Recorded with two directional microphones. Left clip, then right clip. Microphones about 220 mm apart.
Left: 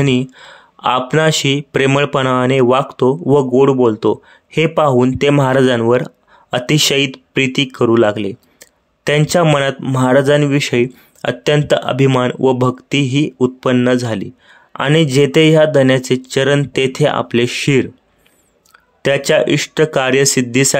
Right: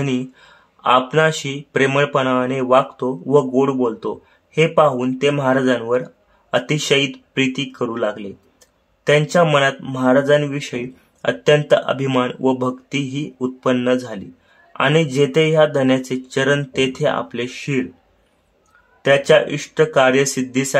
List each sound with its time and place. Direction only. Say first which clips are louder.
0.0 s speech: left 7 dB; 30° left (ahead or behind)
19.0 s speech: left 1 dB; 35° left (ahead or behind)